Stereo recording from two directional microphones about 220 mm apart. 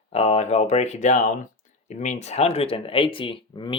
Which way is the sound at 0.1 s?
30° left (ahead or behind).